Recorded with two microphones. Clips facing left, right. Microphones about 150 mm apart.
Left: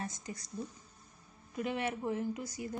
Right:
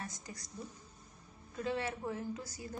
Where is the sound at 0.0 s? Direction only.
20° left (ahead or behind).